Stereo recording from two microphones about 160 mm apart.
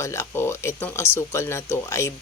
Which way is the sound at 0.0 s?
15° left (ahead or behind).